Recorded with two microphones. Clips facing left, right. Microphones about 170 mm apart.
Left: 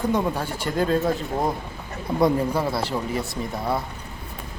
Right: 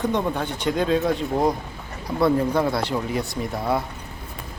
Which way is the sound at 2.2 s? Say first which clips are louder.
Right 1 dB; 15° left (ahead or behind).